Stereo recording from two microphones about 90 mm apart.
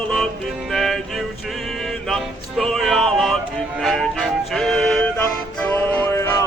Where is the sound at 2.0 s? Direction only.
5° left (ahead or behind).